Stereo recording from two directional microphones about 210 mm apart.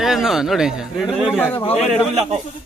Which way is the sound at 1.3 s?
10° left (ahead or behind).